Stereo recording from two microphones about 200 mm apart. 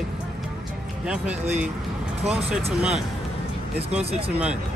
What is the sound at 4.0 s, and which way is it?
Speech, 30° right (ahead or behind).